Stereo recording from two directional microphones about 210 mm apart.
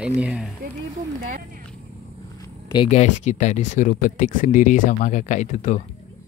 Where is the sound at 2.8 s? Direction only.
35° left (ahead or behind).